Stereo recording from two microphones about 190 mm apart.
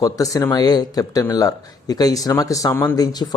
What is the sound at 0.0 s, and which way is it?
Speech, 20° left (ahead or behind).